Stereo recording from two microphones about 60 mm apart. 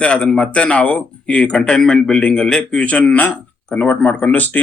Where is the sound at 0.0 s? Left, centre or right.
Centre.